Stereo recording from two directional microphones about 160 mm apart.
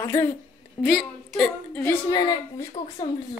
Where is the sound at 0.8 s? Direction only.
Centre (ahead or behind).